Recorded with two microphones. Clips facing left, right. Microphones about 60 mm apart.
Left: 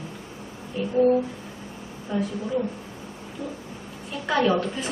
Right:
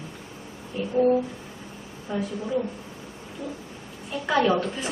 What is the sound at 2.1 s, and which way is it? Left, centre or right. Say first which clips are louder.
Speech: left 2 dB; centre.